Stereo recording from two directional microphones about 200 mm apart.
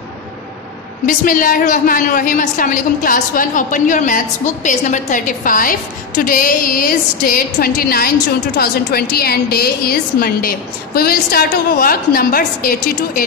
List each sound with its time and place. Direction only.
1.0 s a woman's voice: 45° left (ahead or behind)